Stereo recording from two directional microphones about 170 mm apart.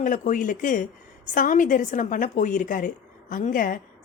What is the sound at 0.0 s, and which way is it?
A woman's voice, 50° left (ahead or behind).